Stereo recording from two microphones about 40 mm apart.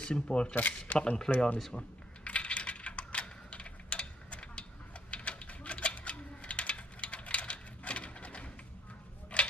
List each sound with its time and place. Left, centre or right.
0.0 s speech: left
0.6 s speech: left
0.9 s speech: centre
2.2 s coin: left
5.1 s mechanisms: left